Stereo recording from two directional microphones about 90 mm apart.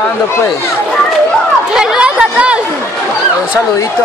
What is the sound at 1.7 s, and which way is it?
Chatter, 10° right (ahead or behind).